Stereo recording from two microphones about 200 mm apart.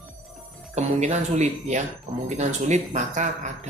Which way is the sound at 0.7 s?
35° right (ahead or behind).